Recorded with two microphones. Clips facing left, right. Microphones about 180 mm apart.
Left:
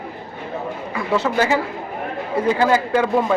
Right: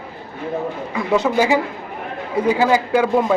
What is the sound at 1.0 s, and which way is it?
Speech, 15° right (ahead or behind).